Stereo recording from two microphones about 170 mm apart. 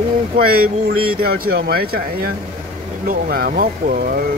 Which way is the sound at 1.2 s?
65° right (ahead or behind).